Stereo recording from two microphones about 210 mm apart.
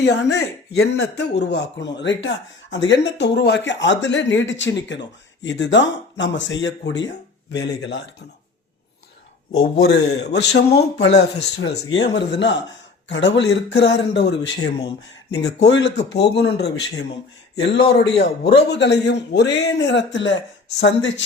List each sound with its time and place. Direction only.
0.0 s speech: 55° left (ahead or behind)
9.7 s speech: 50° left (ahead or behind)